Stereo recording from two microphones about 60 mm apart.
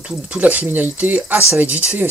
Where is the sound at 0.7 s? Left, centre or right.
Right.